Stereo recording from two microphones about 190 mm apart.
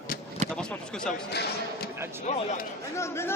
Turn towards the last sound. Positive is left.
turn(degrees=15)  # may be behind; listen again after turning